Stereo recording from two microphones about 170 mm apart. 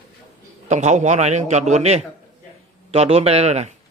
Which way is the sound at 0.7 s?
45° right (ahead or behind).